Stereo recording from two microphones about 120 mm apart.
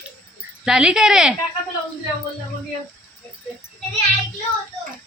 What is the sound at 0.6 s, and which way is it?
Speech, 5° right (ahead or behind).